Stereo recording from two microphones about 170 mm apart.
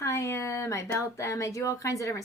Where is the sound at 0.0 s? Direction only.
15° left (ahead or behind).